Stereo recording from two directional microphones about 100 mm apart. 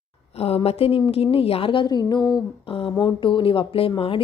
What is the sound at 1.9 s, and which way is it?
Speech, 45° left (ahead or behind).